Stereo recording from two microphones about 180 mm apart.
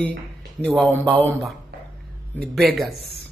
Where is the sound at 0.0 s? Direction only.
70° right (ahead or behind).